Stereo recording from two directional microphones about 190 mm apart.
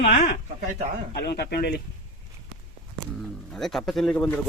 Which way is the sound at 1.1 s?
60° left (ahead or behind).